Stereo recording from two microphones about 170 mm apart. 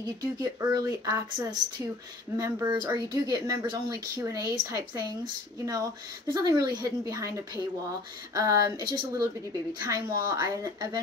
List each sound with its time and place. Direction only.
0.0 s speech: 20° right (ahead or behind)